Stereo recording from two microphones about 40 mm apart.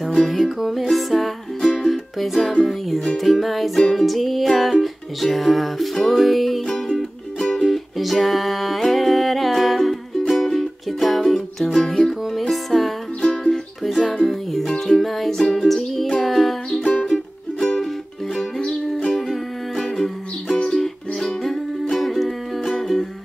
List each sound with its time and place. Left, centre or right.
0.2 s music: centre
12.3 s music: centre
19.1 s music: centre